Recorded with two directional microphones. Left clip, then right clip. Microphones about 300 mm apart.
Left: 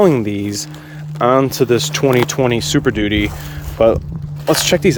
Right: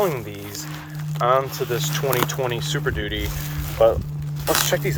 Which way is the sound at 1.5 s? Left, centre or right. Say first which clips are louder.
Left 10 dB; left.